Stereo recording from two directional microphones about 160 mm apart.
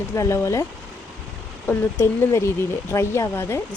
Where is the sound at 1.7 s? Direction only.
15° left (ahead or behind).